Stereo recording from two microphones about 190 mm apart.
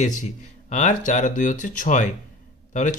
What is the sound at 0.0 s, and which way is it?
Speech, 40° left (ahead or behind).